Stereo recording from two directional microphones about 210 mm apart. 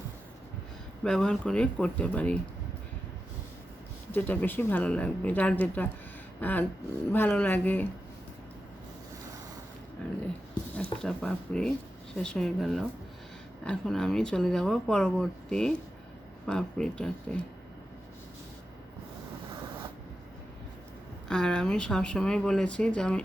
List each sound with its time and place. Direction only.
1.0 s speech: 5° left (ahead or behind)
4.1 s speech: 10° left (ahead or behind)
10.0 s dog: 5° left (ahead or behind)
11.0 s speech: 5° left (ahead or behind)
21.2 s speech: 5° left (ahead or behind)